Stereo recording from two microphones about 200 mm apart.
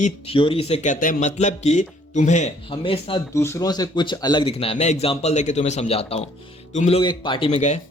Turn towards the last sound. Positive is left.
turn(degrees=35)  # may be behind; listen again after turning